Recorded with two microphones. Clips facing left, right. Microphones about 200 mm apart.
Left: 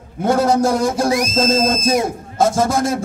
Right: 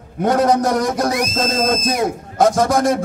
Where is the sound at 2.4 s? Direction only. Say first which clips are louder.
Right 1 dB; 25° left (ahead or behind).